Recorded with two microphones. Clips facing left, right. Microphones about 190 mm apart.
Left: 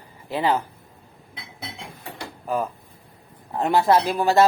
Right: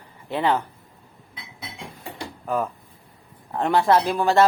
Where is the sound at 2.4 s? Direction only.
5° left (ahead or behind).